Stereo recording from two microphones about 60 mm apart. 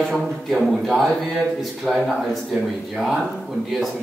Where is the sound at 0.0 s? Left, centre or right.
Centre.